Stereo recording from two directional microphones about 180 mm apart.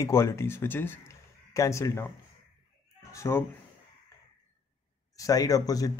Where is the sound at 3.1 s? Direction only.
15° left (ahead or behind).